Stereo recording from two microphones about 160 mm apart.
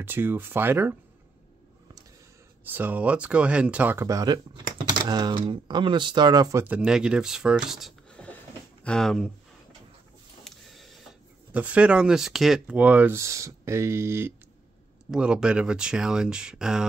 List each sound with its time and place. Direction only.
0.0 s speech: 15° right (ahead or behind)
2.6 s speech: 10° right (ahead or behind)
6.6 s speech: 5° right (ahead or behind)
10.4 s a sound: centre (ahead or behind)
11.5 s speech: 10° right (ahead or behind)
15.0 s speech: 5° right (ahead or behind)